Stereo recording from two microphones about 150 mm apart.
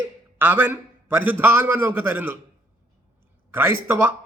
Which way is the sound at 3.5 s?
15° right (ahead or behind).